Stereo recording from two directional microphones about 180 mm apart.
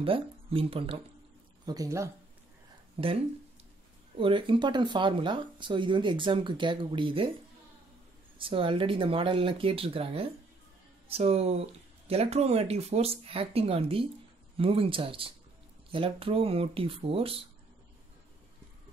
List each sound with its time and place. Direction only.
0.0 s speech: 30° right (ahead or behind)
1.7 s speech: 20° right (ahead or behind)
3.0 s speech: 35° right (ahead or behind)
4.2 s speech: 30° right (ahead or behind)
8.4 s speech: 30° right (ahead or behind)